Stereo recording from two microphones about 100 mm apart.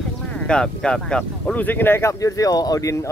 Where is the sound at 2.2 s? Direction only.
35° left (ahead or behind).